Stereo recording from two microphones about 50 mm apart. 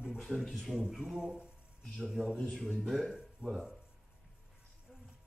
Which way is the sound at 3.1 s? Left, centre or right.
Centre.